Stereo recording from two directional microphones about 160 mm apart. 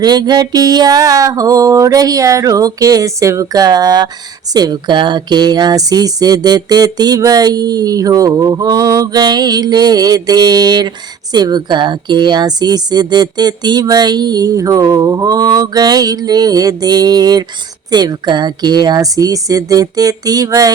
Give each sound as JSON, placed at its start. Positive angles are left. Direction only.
{"t": 0.0, "sound": "speech", "side_deg": -25}